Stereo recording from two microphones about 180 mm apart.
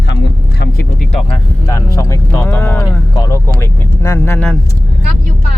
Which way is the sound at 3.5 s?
15° left (ahead or behind).